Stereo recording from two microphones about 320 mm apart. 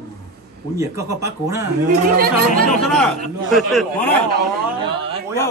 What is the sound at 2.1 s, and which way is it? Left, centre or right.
Speech, right.